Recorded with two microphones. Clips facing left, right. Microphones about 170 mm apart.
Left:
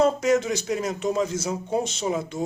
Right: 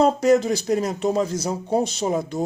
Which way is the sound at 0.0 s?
35° right (ahead or behind).